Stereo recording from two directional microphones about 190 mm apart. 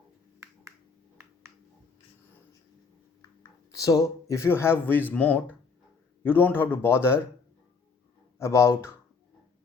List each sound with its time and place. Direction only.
1.2 s a sound: 15° right (ahead or behind)
3.7 s speech: 20° left (ahead or behind)
8.4 s speech: 15° left (ahead or behind)